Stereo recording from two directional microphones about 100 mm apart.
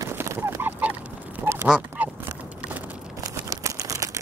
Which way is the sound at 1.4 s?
20° right (ahead or behind).